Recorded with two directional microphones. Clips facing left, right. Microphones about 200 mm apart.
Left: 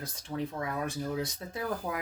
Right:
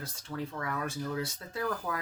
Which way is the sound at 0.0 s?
20° left (ahead or behind).